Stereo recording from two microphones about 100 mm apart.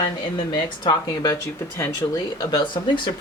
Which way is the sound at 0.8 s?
40° left (ahead or behind).